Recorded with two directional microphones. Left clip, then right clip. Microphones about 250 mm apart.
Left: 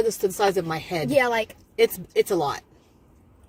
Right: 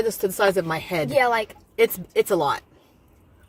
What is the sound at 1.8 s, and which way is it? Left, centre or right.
Speech, centre.